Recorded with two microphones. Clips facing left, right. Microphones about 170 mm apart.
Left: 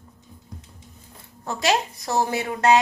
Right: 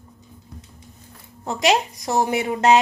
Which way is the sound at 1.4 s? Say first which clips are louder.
Right 3 dB; 20° right (ahead or behind).